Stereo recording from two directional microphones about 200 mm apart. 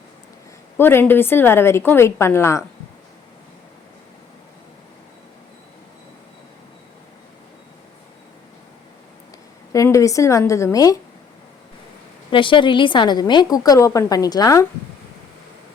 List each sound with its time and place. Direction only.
0.8 s a woman's voice: 10° left (ahead or behind)
9.7 s a woman's voice: 15° left (ahead or behind)
12.3 s a woman's voice: 25° left (ahead or behind)